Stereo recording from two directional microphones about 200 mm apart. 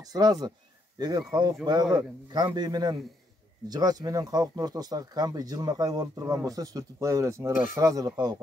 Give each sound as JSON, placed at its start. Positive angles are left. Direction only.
{"t": 0.1, "sound": "speech", "side_deg": -20}